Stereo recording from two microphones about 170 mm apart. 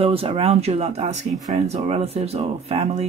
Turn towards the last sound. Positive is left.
turn(degrees=-35)  # may be behind; listen again after turning